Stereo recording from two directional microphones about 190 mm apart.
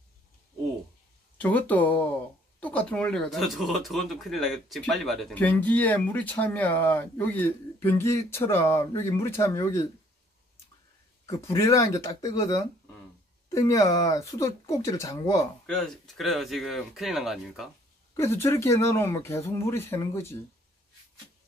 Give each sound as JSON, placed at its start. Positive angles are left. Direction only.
{"t": 1.4, "sound": "speech", "side_deg": 10}
{"t": 11.2, "sound": "speech", "side_deg": 15}
{"t": 15.6, "sound": "speech", "side_deg": 0}
{"t": 18.1, "sound": "speech", "side_deg": 15}